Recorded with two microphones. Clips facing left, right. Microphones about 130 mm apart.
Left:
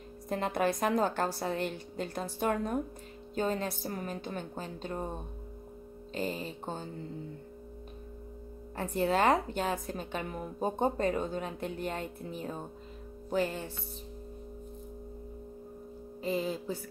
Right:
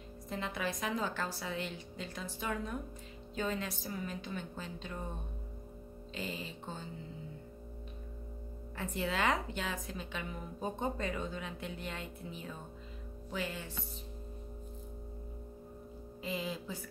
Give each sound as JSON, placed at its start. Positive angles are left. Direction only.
{"t": 0.3, "sound": "a woman's voice", "side_deg": 50}
{"t": 6.1, "sound": "a woman's voice", "side_deg": 45}
{"t": 8.7, "sound": "a woman's voice", "side_deg": 45}
{"t": 13.3, "sound": "music", "side_deg": 40}
{"t": 16.2, "sound": "music", "side_deg": 40}